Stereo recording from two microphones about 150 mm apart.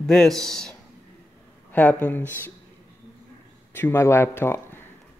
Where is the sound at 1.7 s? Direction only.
10° left (ahead or behind).